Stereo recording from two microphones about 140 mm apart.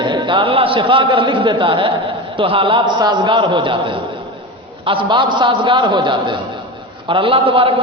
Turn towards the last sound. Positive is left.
turn(degrees=-40)  # may be behind; listen again after turning